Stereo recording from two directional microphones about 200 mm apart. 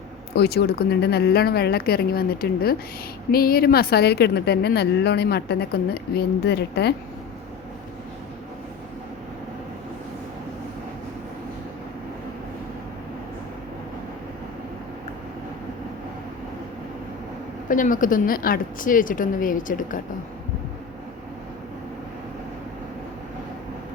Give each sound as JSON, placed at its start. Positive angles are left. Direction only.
{"t": 0.3, "sound": "a woman's voice", "side_deg": 50}
{"t": 17.7, "sound": "a woman's voice", "side_deg": 40}